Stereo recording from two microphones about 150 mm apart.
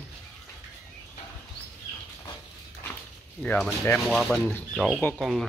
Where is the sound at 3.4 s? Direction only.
Centre (ahead or behind).